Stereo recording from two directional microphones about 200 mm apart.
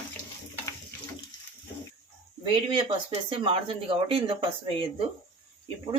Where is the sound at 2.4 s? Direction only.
25° right (ahead or behind).